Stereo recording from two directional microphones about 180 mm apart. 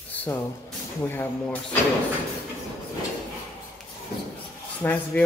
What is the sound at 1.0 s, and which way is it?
Speech, 10° left (ahead or behind).